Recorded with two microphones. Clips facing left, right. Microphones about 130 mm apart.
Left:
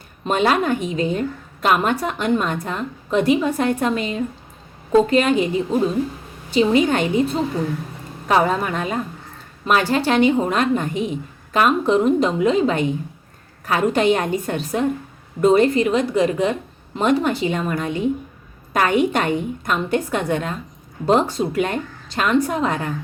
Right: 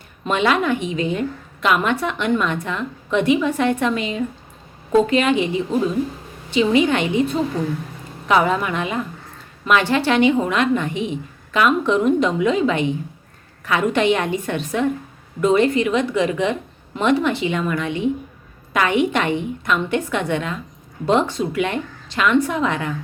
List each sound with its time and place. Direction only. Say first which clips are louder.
0.3 s speech: even; 40° left (ahead or behind)